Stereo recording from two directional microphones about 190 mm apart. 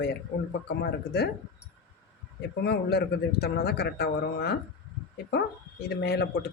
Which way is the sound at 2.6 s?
60° left (ahead or behind).